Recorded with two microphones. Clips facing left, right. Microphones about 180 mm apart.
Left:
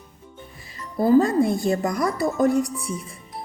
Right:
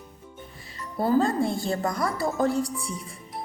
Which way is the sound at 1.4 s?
20° left (ahead or behind).